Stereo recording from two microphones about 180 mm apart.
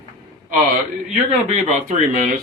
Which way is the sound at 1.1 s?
45° right (ahead or behind).